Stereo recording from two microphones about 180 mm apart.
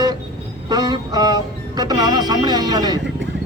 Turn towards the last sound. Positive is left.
turn(degrees=-20)  # may be behind; listen again after turning